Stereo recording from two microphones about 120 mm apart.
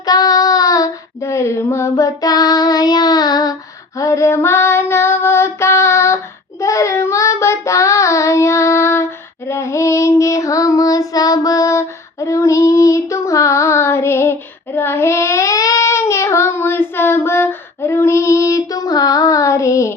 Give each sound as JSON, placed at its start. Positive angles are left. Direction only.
{"t": 0.0, "sound": "child singing", "side_deg": 35}
{"t": 3.9, "sound": "female singing", "side_deg": 25}
{"t": 6.6, "sound": "child singing", "side_deg": 25}